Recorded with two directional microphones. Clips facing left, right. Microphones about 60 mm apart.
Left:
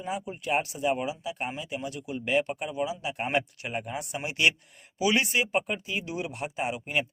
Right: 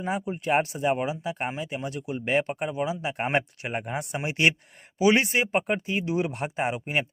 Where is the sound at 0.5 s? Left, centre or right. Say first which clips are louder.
Right 3 dB; right.